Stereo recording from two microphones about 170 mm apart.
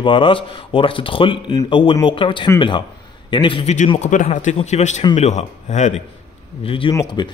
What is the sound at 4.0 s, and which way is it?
A man's voice, 45° left (ahead or behind).